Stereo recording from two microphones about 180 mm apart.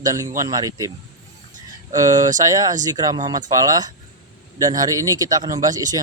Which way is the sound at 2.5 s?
20° right (ahead or behind).